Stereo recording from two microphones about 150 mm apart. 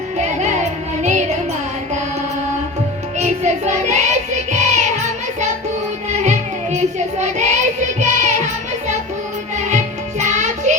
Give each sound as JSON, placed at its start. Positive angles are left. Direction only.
{"t": 0.2, "sound": "music", "side_deg": -50}
{"t": 3.2, "sound": "child singing", "side_deg": -50}
{"t": 6.1, "sound": "music", "side_deg": -50}
{"t": 9.6, "sound": "music", "side_deg": -55}